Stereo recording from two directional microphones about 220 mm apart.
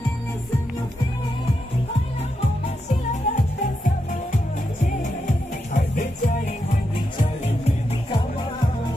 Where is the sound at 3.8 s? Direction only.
35° left (ahead or behind).